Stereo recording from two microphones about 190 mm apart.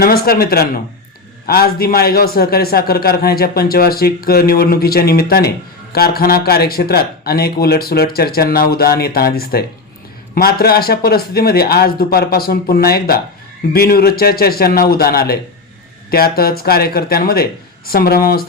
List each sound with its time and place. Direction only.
0.0 s a man's voice: 50° left (ahead or behind)